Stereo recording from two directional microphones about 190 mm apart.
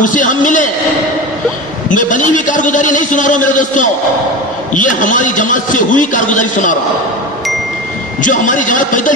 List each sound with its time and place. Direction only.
0.0 s a man's voice: 45° left (ahead or behind)
1.9 s a man's voice: 45° left (ahead or behind)
8.2 s a man's voice: 45° left (ahead or behind)